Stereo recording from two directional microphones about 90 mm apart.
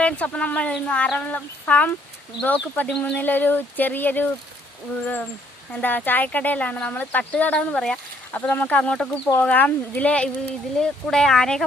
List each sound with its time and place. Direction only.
0.0 s speech: 15° left (ahead or behind)
5.7 s speech: 20° left (ahead or behind)